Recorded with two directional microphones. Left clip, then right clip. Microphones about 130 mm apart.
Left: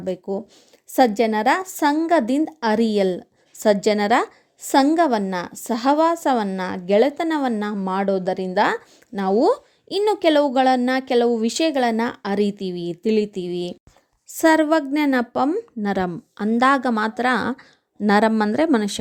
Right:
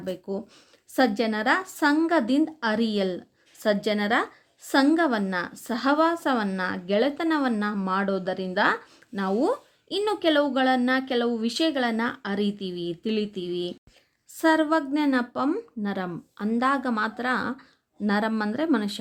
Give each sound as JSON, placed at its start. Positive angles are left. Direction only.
{"t": 0.0, "sound": "a woman's voice", "side_deg": 45}